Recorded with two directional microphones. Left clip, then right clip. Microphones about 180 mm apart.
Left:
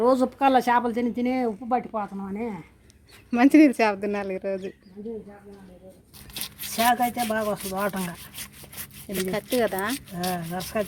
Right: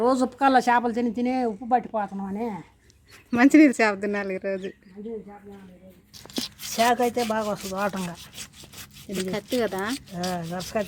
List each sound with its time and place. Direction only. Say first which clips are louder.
0.0 s speech: left 1 dB; 10° right (ahead or behind)
6.3 s tearing: right 4 dB; 5° left (ahead or behind)
6.8 s speech: even; 35° right (ahead or behind)
8.0 s speech: even; centre (ahead or behind)
10.2 s speech: left 1 dB; 25° right (ahead or behind)